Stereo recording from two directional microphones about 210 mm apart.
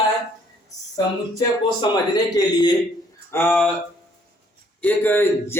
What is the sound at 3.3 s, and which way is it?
Speech, 10° left (ahead or behind).